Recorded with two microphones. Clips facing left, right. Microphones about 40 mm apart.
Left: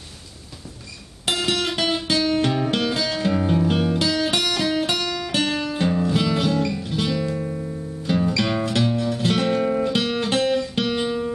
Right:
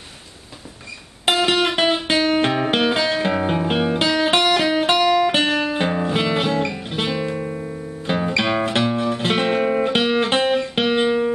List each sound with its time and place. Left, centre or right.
1.2 s music: right